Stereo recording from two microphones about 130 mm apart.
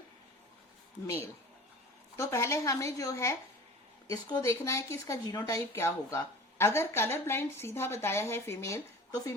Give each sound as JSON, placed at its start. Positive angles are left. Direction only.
{"t": 2.1, "sound": "speech", "side_deg": 25}